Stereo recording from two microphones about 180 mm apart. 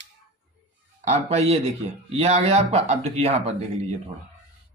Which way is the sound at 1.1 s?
35° right (ahead or behind).